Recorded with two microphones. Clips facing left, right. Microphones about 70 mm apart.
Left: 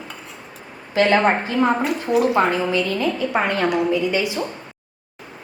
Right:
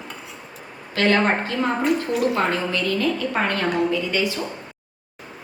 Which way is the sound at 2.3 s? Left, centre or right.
Centre.